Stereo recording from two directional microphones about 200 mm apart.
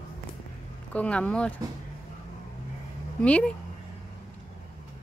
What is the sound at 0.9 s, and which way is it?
Speech, 5° left (ahead or behind).